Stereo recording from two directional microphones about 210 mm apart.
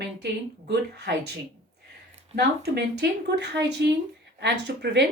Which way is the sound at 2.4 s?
55° right (ahead or behind).